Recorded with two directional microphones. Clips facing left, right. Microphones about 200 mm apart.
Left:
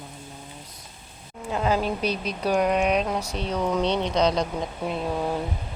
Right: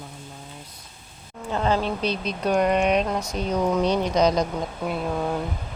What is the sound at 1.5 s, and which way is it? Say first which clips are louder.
Speech: right 1 dB; 5° left (ahead or behind).